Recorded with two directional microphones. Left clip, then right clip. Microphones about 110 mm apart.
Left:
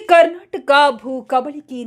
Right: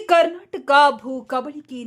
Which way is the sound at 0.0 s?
Centre (ahead or behind).